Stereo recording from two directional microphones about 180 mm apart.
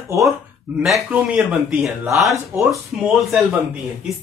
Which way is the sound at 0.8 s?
5° right (ahead or behind).